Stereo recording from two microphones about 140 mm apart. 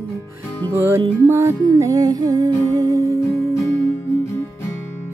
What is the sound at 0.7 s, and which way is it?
Music, 20° right (ahead or behind).